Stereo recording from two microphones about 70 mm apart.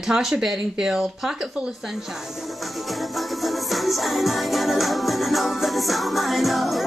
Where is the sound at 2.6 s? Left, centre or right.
Centre.